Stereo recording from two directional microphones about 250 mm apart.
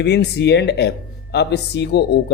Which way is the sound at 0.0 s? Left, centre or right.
Left.